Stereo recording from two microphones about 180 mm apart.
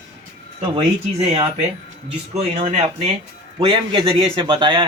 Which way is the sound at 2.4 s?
35° right (ahead or behind).